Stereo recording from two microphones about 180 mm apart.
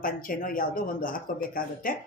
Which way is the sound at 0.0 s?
50° left (ahead or behind).